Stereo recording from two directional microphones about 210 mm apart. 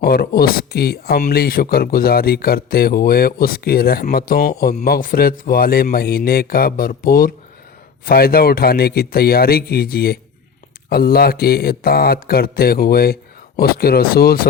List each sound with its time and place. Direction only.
0.0 s speech: 45° left (ahead or behind)